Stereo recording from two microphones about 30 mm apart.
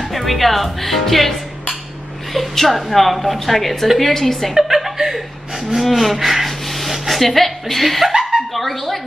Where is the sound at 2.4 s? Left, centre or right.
Centre.